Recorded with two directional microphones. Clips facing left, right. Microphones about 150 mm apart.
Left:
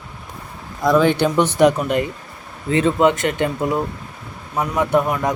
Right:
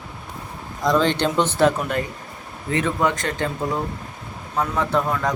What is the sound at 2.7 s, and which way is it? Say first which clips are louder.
A man's voice: left 6 dB; 25° left (ahead or behind).